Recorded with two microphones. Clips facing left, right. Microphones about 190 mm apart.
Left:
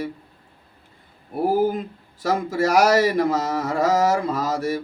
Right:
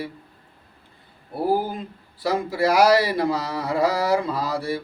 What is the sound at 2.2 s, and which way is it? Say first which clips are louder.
Speech: left 1 dB; 45° left (ahead or behind).